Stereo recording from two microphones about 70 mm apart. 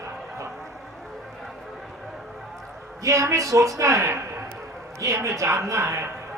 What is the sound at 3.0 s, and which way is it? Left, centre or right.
A woman's voice, right.